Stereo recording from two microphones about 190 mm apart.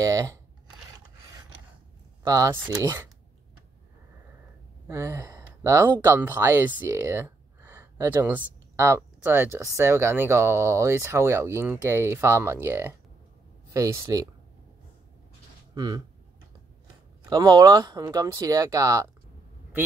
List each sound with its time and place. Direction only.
0.0 s speech: 15° right (ahead or behind)
2.2 s speech: 15° right (ahead or behind)
4.8 s speech: 15° right (ahead or behind)
15.7 s speech: 20° right (ahead or behind)
17.3 s speech: 20° right (ahead or behind)